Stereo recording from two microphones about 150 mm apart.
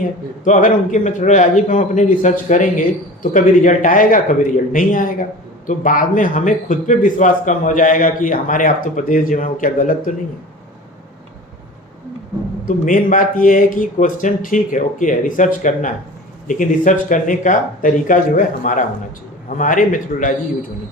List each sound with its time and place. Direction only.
0.4 s a man's voice: 55° left (ahead or behind)
12.6 s a man's voice: 60° left (ahead or behind)